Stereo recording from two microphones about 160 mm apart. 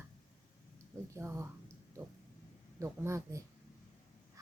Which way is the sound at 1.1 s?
15° right (ahead or behind).